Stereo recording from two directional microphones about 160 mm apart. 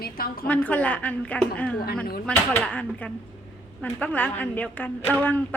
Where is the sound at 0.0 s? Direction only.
65° left (ahead or behind).